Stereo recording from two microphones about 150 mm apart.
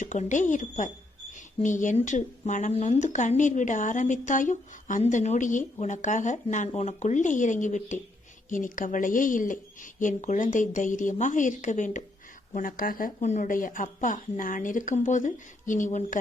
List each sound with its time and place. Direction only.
0.0 s speech: 55° left (ahead or behind)
12.5 s speech: 65° left (ahead or behind)
13.1 s speech: 50° left (ahead or behind)